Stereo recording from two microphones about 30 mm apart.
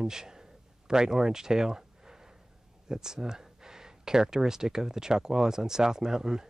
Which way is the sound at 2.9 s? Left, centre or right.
Centre.